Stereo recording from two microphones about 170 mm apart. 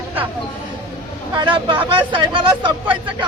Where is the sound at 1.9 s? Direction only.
30° right (ahead or behind).